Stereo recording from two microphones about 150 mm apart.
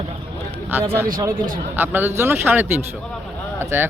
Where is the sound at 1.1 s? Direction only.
25° right (ahead or behind).